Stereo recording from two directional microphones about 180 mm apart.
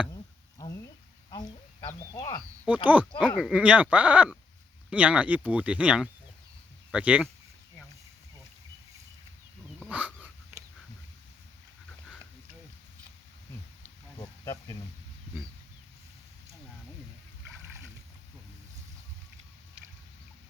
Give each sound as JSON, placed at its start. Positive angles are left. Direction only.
{"t": 0.6, "sound": "a sound", "side_deg": 20}
{"t": 1.3, "sound": "duck", "side_deg": 25}
{"t": 1.9, "sound": "speech", "side_deg": 20}
{"t": 2.6, "sound": "speech", "side_deg": -10}
{"t": 3.2, "sound": "speech", "side_deg": 0}
{"t": 9.8, "sound": "dog", "side_deg": -5}
{"t": 14.2, "sound": "a sound", "side_deg": 20}